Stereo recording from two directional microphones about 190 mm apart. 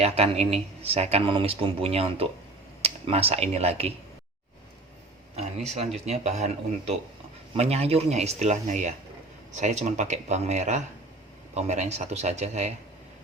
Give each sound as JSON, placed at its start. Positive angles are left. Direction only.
{"t": 0.0, "sound": "speech", "side_deg": -35}
{"t": 5.6, "sound": "speech", "side_deg": -35}